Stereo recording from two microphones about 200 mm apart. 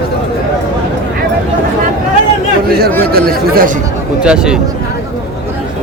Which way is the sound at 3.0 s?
50° right (ahead or behind).